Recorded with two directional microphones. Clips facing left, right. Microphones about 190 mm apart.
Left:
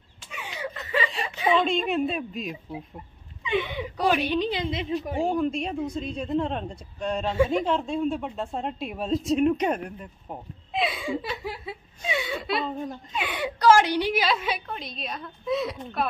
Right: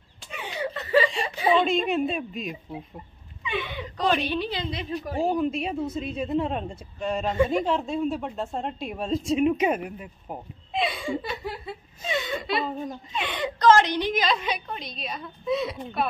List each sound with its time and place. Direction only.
0.4 s a sound: 35° right (ahead or behind)
1.2 s a woman's voice: 35° right (ahead or behind)
1.6 s a woman's voice: centre (ahead or behind)
3.4 s speech: 15° left (ahead or behind)
5.2 s a woman's voice: 5° right (ahead or behind)